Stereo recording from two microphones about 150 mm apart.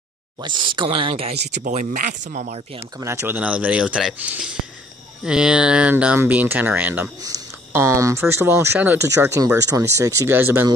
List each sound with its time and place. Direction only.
0.4 s speech: 30° right (ahead or behind)
1.5 s speech: 55° right (ahead or behind)
2.8 s speech: 20° right (ahead or behind)
7.2 s speech: 20° right (ahead or behind)